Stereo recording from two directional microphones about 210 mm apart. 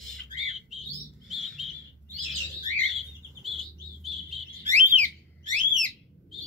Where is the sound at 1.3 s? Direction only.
Centre (ahead or behind).